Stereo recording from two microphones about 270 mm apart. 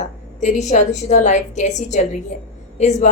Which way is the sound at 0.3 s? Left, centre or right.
Left.